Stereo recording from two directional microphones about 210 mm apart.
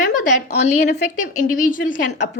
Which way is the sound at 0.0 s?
35° left (ahead or behind).